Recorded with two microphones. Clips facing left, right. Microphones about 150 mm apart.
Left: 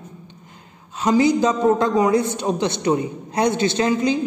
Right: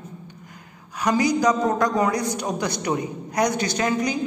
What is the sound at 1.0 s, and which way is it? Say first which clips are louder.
A man's voice: left 4 dB; 25° left (ahead or behind).